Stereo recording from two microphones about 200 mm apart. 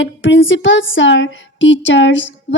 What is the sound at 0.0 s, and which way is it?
Music, 65° left (ahead or behind).